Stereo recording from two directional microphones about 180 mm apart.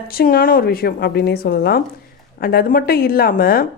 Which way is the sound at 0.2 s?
55° left (ahead or behind).